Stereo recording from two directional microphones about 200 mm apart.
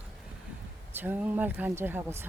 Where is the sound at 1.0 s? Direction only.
10° right (ahead or behind).